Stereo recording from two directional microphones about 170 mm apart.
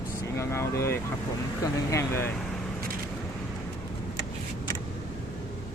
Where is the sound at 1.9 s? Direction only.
15° left (ahead or behind).